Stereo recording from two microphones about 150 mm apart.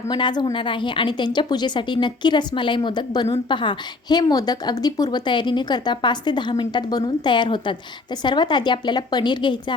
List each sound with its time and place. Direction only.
0.1 s a woman's voice: 30° left (ahead or behind)